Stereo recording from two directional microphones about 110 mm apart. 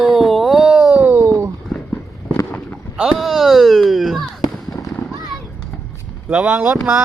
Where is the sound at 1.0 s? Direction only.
20° right (ahead or behind).